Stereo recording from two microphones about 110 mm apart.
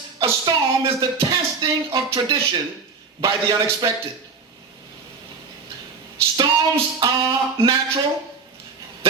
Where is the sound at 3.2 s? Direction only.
45° right (ahead or behind).